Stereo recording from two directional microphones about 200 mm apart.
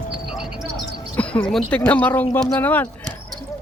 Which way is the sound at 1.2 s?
5° left (ahead or behind).